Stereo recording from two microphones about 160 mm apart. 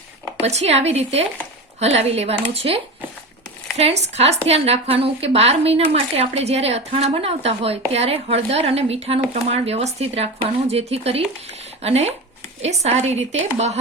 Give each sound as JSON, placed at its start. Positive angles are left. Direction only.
{"t": 0.4, "sound": "a woman's voice", "side_deg": -40}